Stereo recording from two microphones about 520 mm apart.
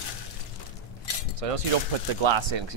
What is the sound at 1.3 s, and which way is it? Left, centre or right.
Speech, right.